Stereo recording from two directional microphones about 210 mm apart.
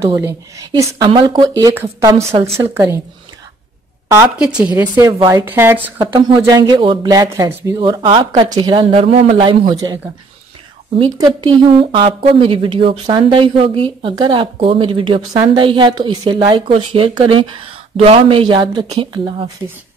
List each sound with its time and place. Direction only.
0.0 s speech: 15° right (ahead or behind)
4.1 s speech: 5° right (ahead or behind)
5.0 s speech: 15° right (ahead or behind)
5.9 s speech: 20° right (ahead or behind)
11.0 s speech: 20° right (ahead or behind)